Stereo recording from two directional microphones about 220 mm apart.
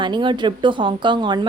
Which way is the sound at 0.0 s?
20° right (ahead or behind).